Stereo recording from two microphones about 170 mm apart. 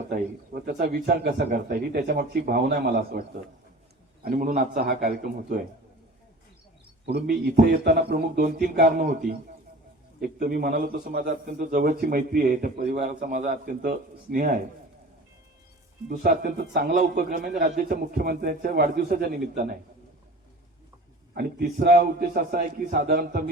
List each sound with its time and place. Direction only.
0.1 s a man's voice: 60° right (ahead or behind)
4.2 s a man's voice: 55° right (ahead or behind)
7.0 s a man's voice: 80° right; by 13.9 s 55° right (ahead or behind)
16.0 s a man's voice: 60° right (ahead or behind)
21.3 s a man's voice: 65° right (ahead or behind)